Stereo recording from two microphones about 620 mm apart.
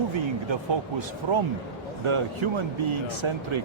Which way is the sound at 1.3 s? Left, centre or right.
Right.